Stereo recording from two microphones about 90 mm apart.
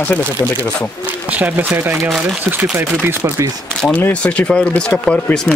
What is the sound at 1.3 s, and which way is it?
Chopping, 15° right (ahead or behind).